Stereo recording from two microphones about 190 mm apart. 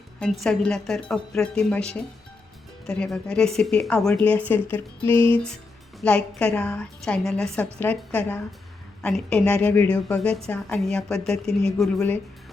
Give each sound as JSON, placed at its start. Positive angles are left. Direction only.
{"t": 0.2, "sound": "a woman's voice", "side_deg": 0}